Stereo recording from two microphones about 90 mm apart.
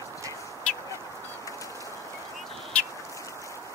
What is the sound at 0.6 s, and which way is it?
Duck, 10° left (ahead or behind).